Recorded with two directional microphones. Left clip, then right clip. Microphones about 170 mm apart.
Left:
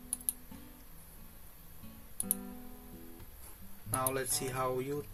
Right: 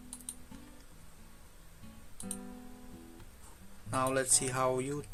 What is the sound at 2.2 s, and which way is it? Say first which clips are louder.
Music: left 2 dB; centre (ahead or behind).